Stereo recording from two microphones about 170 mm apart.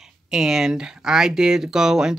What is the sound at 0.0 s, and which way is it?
Speech, 5° right (ahead or behind).